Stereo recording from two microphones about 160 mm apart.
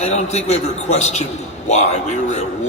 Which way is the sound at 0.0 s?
45° left (ahead or behind).